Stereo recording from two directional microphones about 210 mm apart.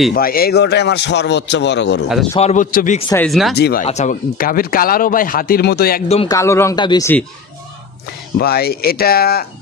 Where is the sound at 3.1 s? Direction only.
Centre (ahead or behind).